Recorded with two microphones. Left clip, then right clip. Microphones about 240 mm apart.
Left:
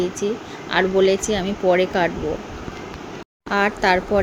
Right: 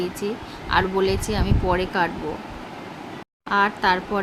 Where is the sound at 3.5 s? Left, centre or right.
Centre.